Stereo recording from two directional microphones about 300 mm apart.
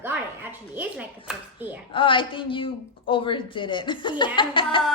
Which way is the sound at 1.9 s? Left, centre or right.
Centre.